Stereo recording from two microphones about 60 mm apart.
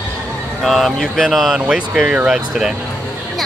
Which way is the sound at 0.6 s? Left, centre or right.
Centre.